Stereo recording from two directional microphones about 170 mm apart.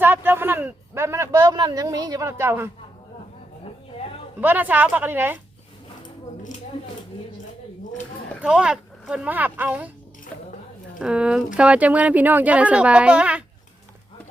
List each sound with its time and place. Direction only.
0.0 s speech: 10° right (ahead or behind)
4.4 s speech: 10° right (ahead or behind)
8.4 s speech: 5° right (ahead or behind)
11.0 s speech: 5° right (ahead or behind)